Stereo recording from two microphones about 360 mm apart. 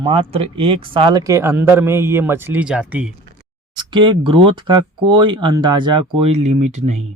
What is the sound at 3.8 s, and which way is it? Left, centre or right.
Speech, centre.